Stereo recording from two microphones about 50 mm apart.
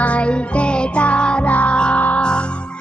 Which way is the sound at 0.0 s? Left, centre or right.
Left.